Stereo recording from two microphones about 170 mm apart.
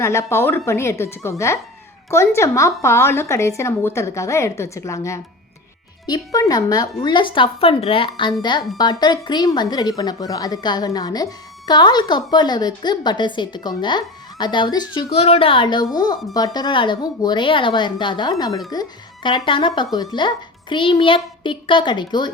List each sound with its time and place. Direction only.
0.0 s speech: 15° left (ahead or behind)